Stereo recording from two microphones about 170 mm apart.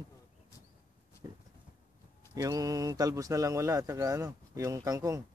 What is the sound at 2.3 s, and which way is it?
Speech, 20° right (ahead or behind).